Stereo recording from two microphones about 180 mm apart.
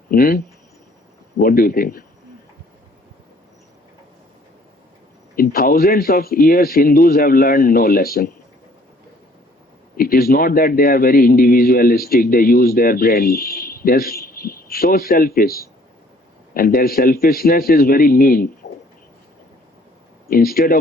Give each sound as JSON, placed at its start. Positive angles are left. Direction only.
{"t": 0.1, "sound": "a man's voice", "side_deg": 55}
{"t": 5.4, "sound": "a man's voice", "side_deg": 55}
{"t": 10.0, "sound": "a man's voice", "side_deg": 55}
{"t": 18.6, "sound": "a sound", "side_deg": 55}
{"t": 20.2, "sound": "a man's voice", "side_deg": 55}